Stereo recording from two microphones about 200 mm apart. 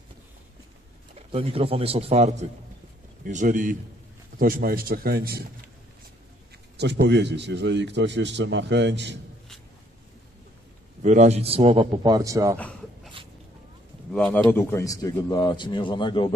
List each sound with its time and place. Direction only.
1.1 s a man's voice: 30° right (ahead or behind); by 5.4 s 50° right (ahead or behind)
6.8 s a man's voice: 60° right (ahead or behind)
11.0 s a man's voice: 35° right (ahead or behind); by 12.5 s 15° right (ahead or behind)
12.5 s a sound: 5° left (ahead or behind)
14.1 s speech: 5° left (ahead or behind); by 16.3 s 25° left (ahead or behind)